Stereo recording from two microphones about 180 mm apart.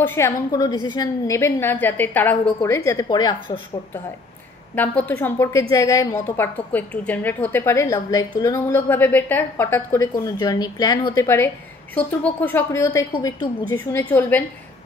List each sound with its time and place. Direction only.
0.0 s a woman's voice: 15° left (ahead or behind)
4.7 s a woman's voice: 10° left (ahead or behind)